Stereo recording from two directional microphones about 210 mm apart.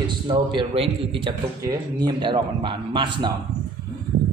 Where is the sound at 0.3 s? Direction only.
25° right (ahead or behind).